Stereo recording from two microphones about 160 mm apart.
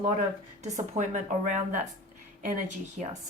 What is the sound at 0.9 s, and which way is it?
Speech, 50° right (ahead or behind).